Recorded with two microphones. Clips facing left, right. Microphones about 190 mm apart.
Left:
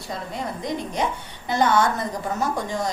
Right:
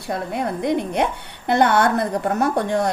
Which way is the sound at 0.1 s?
60° right (ahead or behind).